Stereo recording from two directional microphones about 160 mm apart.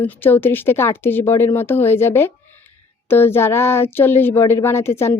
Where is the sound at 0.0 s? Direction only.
10° left (ahead or behind).